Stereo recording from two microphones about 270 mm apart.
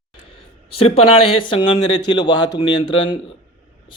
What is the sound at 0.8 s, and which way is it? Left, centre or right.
Speech, left.